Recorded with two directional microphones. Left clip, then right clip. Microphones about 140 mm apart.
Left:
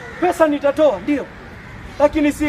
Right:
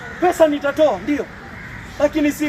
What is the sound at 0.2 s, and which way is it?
Speech, 15° left (ahead or behind).